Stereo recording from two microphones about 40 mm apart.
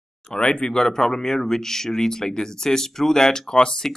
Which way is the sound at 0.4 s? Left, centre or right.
Left.